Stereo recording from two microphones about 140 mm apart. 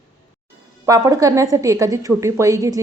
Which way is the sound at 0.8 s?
25° right (ahead or behind).